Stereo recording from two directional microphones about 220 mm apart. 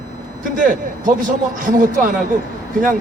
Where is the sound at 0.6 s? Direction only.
35° right (ahead or behind).